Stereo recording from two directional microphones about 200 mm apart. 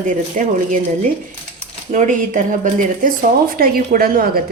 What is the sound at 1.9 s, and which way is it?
A woman's voice, 40° right (ahead or behind).